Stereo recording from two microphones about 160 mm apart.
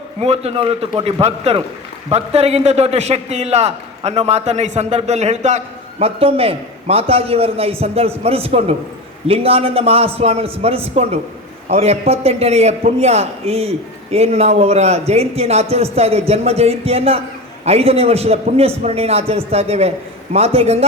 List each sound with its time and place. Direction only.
0.2 s a man's voice: 40° right (ahead or behind)